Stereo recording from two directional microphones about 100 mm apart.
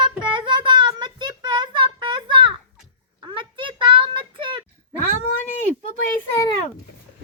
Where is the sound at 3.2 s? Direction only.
55° right (ahead or behind).